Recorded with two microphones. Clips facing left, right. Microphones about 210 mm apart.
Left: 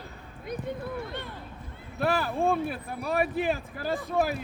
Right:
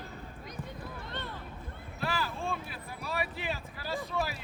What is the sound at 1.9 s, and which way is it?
Speech, 60° left (ahead or behind).